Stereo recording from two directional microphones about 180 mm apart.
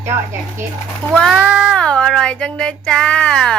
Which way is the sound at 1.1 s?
Centre (ahead or behind).